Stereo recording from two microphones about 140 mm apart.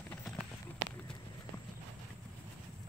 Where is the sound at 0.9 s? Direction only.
5° left (ahead or behind).